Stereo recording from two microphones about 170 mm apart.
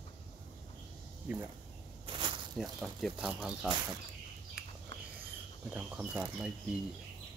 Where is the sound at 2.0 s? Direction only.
30° right (ahead or behind).